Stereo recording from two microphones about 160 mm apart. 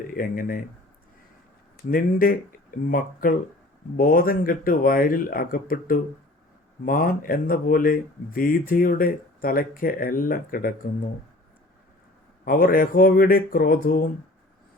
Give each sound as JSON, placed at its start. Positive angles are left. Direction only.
{"t": 0.1, "sound": "speech", "side_deg": 60}
{"t": 1.9, "sound": "speech", "side_deg": 60}
{"t": 12.5, "sound": "speech", "side_deg": 65}